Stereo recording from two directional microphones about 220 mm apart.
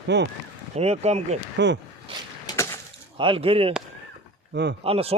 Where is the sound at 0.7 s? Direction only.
30° right (ahead or behind).